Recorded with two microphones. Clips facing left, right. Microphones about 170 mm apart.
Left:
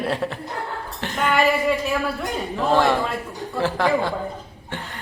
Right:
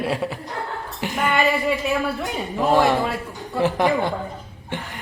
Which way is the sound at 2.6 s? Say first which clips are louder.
Right 1 dB; 15° right (ahead or behind).